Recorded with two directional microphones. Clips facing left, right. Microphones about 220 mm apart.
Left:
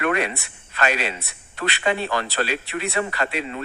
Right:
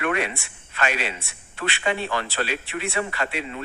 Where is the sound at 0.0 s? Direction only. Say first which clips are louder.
Left 2 dB; 40° left (ahead or behind).